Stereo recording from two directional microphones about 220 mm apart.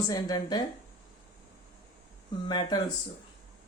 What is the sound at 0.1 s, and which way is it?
Speech, 20° left (ahead or behind).